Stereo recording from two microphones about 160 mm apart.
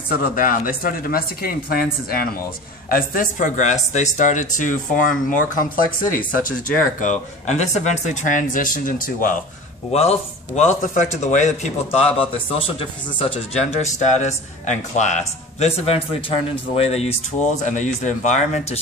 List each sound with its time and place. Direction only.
0.1 s a man's voice: 60° left (ahead or behind)
9.9 s a man's voice: 40° left (ahead or behind)